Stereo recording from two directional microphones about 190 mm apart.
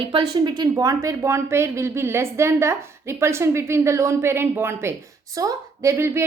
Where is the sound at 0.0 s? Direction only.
25° right (ahead or behind).